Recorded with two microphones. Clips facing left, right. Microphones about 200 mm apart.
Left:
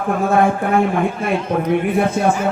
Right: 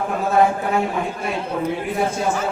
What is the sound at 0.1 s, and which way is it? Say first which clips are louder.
A man's voice: left 3 dB; 55° left (ahead or behind).